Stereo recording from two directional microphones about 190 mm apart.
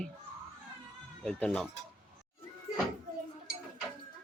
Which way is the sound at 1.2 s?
5° left (ahead or behind).